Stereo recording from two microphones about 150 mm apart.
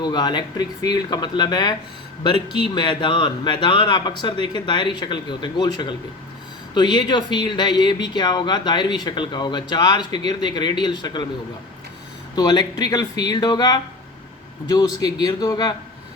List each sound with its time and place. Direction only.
0.0 s speech: 30° left (ahead or behind)
2.7 s speech: 35° left (ahead or behind)
12.4 s speech: 25° left (ahead or behind)